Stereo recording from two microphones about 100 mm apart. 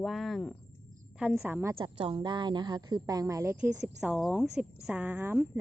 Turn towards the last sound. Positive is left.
turn(degrees=-20)  # may be behind; listen again after turning